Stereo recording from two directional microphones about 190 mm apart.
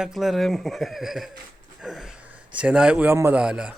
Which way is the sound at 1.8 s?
Centre (ahead or behind).